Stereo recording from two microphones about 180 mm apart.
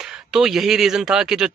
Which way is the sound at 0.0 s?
5° right (ahead or behind).